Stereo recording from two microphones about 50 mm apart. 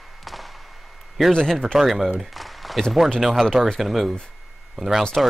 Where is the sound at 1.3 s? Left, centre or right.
Centre.